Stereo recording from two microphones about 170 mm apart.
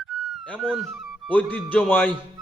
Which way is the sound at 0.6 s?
Centre (ahead or behind).